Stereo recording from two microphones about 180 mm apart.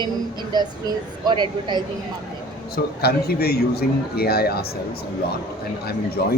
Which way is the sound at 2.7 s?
60° left (ahead or behind).